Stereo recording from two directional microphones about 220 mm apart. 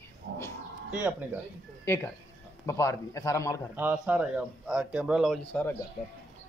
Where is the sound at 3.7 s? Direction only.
5° right (ahead or behind).